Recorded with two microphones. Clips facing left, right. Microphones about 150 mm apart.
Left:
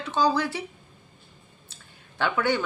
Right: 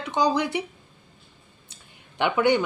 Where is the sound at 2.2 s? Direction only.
20° right (ahead or behind).